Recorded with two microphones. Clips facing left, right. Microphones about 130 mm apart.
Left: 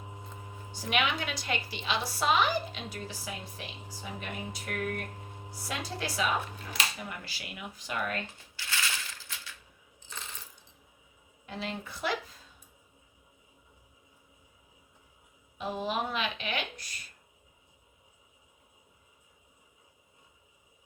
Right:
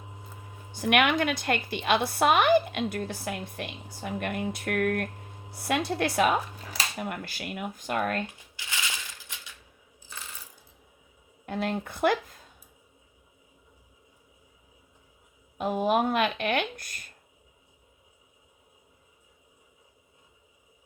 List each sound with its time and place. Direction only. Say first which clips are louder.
0.7 s a woman's voice: right 7 dB; 60° right (ahead or behind)
8.5 s crushing: left 1 dB; 15° right (ahead or behind)
11.4 s speech: right 8 dB; 55° right (ahead or behind)
15.5 s speech: right 8 dB; 50° right (ahead or behind)